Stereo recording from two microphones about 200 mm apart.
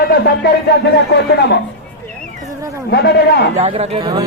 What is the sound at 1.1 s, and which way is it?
Music, 60° left (ahead or behind).